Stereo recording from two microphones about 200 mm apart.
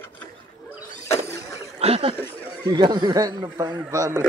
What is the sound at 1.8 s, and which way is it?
Snicker, 30° right (ahead or behind).